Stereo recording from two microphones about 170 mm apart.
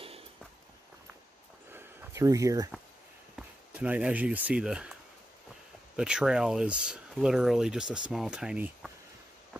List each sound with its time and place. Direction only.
1.7 s a sound: 15° right (ahead or behind)
3.3 s speech: 10° right (ahead or behind)
5.9 s speech: 5° right (ahead or behind)